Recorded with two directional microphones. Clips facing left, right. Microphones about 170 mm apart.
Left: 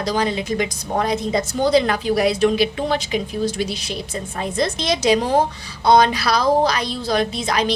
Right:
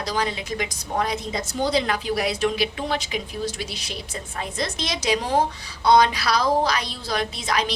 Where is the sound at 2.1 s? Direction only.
25° left (ahead or behind).